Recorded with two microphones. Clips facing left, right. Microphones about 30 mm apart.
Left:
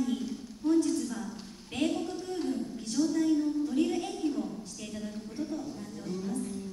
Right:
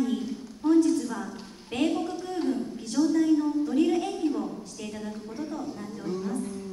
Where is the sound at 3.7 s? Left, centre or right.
Centre.